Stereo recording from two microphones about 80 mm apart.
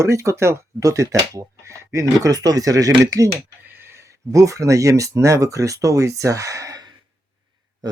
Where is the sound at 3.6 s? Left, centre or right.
Right.